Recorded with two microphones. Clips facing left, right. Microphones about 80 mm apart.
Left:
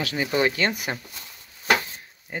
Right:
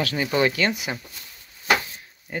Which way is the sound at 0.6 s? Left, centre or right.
Left.